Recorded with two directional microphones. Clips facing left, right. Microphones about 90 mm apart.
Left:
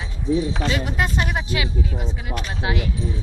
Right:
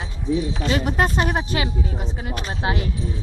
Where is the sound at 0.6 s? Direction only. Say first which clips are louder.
Right 3 dB; 40° right (ahead or behind).